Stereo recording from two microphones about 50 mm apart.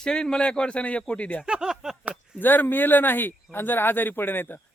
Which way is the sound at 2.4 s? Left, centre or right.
Left.